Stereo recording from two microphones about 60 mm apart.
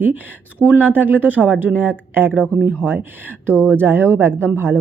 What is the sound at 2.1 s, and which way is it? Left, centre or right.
Speech, right.